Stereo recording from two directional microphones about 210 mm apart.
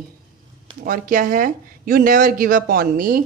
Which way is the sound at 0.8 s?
40° right (ahead or behind).